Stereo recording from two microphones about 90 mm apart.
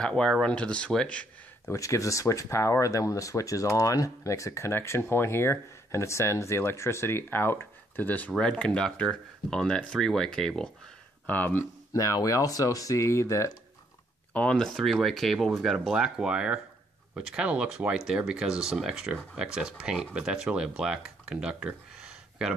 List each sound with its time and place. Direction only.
0.0 s speech: 5° left (ahead or behind)
1.7 s speech: 35° left (ahead or behind); by 10.7 s 5° left (ahead or behind)
11.2 s speech: 20° left (ahead or behind)
11.9 s speech: 35° left (ahead or behind)
14.3 s speech: 10° left (ahead or behind)
14.7 s speech: centre (ahead or behind)